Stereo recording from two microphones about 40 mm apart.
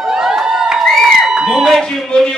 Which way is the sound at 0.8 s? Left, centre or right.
Centre.